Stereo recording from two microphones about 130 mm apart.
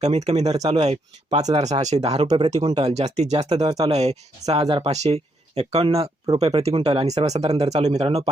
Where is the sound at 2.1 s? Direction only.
50° right (ahead or behind).